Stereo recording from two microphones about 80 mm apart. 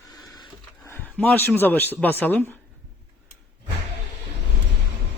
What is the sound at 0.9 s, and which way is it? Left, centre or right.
Speech, left.